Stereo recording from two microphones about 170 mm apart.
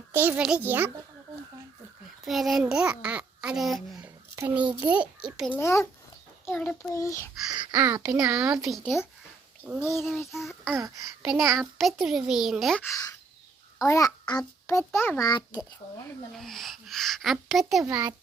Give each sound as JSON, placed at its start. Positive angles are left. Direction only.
{"t": 0.1, "sound": "a child's voice", "side_deg": -10}
{"t": 2.2, "sound": "a child's voice", "side_deg": 0}
{"t": 5.5, "sound": "a child's voice", "side_deg": 15}
{"t": 7.7, "sound": "a child's voice", "side_deg": -20}
{"t": 8.3, "sound": "a child's voice", "side_deg": -5}
{"t": 12.8, "sound": "a child's voice", "side_deg": 20}
{"t": 15.3, "sound": "speech", "side_deg": 25}
{"t": 16.3, "sound": "a child's voice", "side_deg": 0}